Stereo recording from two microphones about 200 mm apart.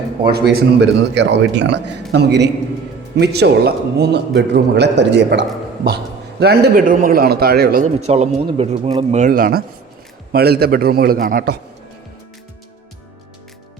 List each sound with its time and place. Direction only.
0.3 s a man's voice: 55° right (ahead or behind)
7.9 s a man's voice: 30° right (ahead or behind); by 11.6 s 50° right (ahead or behind)